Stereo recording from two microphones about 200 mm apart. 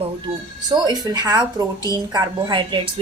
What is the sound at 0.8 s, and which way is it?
A woman's voice, 20° right (ahead or behind).